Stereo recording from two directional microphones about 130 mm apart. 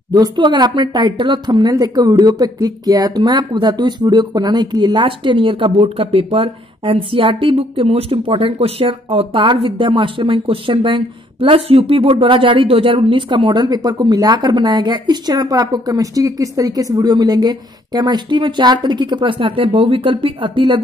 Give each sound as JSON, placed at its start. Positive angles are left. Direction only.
{"t": 0.1, "sound": "speech", "side_deg": -35}